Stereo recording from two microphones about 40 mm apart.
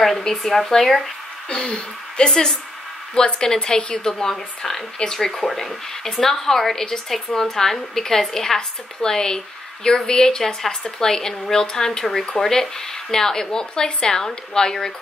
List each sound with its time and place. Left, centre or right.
0.2 s a woman's voice: centre
1.5 s a woman's voice: left